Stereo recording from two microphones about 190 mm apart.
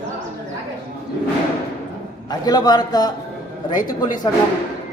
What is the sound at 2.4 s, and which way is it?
Speech, 20° left (ahead or behind).